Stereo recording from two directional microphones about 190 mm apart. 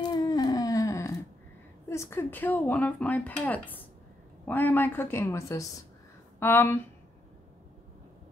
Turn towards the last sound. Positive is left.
turn(degrees=10)  # may be behind; listen again after turning